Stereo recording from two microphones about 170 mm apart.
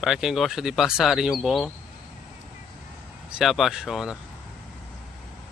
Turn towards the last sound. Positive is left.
turn(degrees=0)  # may be behind; listen again after turning